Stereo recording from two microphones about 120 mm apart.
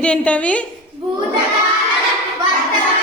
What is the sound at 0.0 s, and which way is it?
Speech, 10° left (ahead or behind).